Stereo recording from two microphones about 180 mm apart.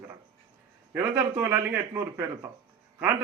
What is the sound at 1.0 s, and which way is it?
A man's voice, 15° right (ahead or behind).